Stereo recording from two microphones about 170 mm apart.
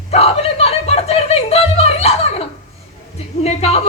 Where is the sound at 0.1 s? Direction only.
35° left (ahead or behind).